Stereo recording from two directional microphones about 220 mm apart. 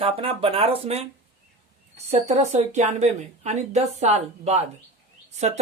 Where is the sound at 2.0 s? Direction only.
30° right (ahead or behind).